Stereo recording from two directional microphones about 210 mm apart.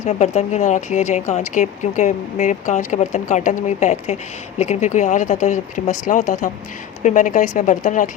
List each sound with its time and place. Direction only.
0.0 s speech: 30° left (ahead or behind)